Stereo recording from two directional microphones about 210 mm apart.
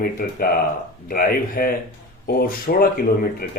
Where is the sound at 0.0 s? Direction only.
45° left (ahead or behind).